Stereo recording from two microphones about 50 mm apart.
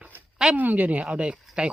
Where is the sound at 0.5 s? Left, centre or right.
Right; by 1.7 s centre.